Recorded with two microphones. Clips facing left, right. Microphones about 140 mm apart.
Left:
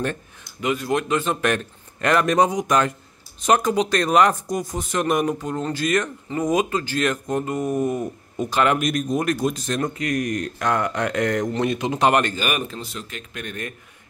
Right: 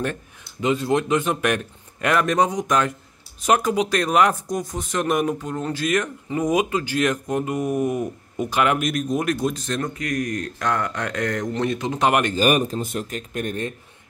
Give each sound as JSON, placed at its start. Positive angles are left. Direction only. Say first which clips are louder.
{"t": 0.6, "sound": "a man's voice", "louder": "right 2 dB", "side_deg": -25}
{"t": 9.9, "sound": "speech", "louder": "left 2 dB", "side_deg": 25}
{"t": 12.4, "sound": "speech", "louder": "right 6 dB", "side_deg": -35}